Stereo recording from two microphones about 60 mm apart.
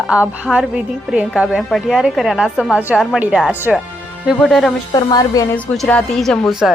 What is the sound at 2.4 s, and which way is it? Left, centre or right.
Speech, centre.